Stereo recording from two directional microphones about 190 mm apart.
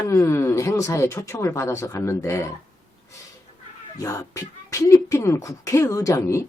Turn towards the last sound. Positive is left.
turn(degrees=15)  # may be behind; listen again after turning